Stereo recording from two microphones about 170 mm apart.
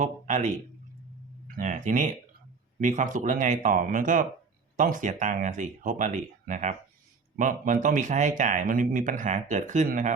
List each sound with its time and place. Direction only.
0.0 s a man's voice: 45° right (ahead or behind)